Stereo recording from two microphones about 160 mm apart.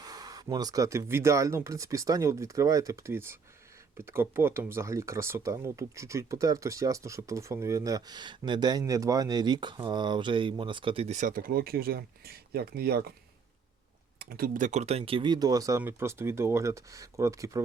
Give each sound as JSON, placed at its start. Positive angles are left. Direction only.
{"t": 0.0, "sound": "speech", "side_deg": -25}
{"t": 14.2, "sound": "speech", "side_deg": -70}